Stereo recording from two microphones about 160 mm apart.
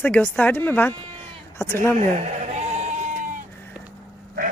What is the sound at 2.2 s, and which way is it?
Bleat, 45° right (ahead or behind).